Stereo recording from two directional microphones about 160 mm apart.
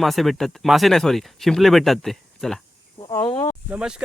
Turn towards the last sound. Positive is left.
turn(degrees=-5)  # may be behind; listen again after turning